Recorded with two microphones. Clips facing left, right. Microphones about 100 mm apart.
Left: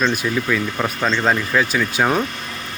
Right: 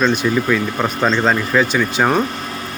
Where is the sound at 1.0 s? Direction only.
10° right (ahead or behind).